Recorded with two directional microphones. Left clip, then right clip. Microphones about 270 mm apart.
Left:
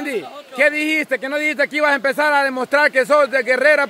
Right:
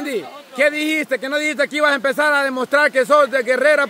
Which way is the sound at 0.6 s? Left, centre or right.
Centre.